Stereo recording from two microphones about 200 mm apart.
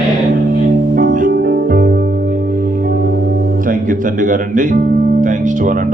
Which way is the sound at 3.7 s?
40° right (ahead or behind).